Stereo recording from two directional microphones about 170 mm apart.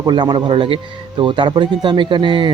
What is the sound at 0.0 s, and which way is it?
Speech, 25° right (ahead or behind).